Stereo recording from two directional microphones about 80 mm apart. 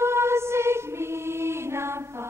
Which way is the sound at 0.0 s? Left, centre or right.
Right.